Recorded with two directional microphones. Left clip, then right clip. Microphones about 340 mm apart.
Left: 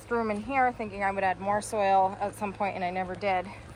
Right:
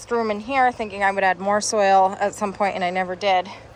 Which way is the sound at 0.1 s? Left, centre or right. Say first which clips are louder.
Right 7 dB; centre.